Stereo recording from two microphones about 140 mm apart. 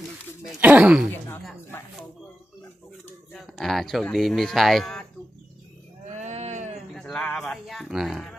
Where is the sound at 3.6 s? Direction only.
Centre (ahead or behind).